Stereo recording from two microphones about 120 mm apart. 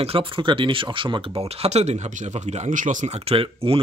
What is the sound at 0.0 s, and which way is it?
Speech, 50° right (ahead or behind).